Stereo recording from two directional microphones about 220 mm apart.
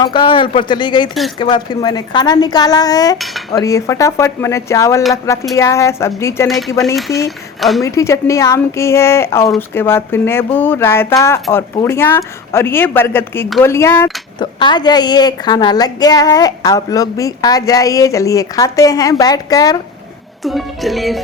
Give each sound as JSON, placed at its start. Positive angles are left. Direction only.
{"t": 0.0, "sound": "a woman's voice", "side_deg": 20}
{"t": 3.2, "sound": "cutlery", "side_deg": 0}
{"t": 3.5, "sound": "a woman's voice", "side_deg": 15}
{"t": 6.5, "sound": "music", "side_deg": 0}
{"t": 7.3, "sound": "speech", "side_deg": 0}
{"t": 7.8, "sound": "a woman's voice", "side_deg": 15}
{"t": 20.4, "sound": "music", "side_deg": 0}